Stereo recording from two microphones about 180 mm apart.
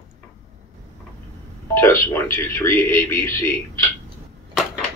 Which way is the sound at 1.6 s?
15° left (ahead or behind).